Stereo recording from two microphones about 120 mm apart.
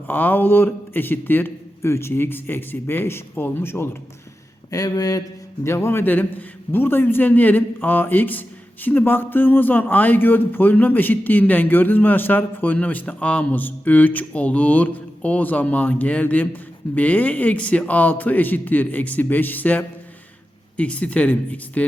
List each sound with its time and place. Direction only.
0.1 s a man's voice: 15° left (ahead or behind)
4.7 s a man's voice: 30° left (ahead or behind); by 21.8 s 10° left (ahead or behind)